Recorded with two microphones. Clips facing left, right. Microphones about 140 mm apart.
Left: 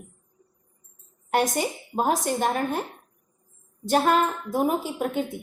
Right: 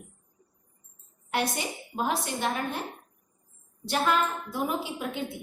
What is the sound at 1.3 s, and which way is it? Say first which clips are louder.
A woman's voice: left 6 dB; 45° left (ahead or behind).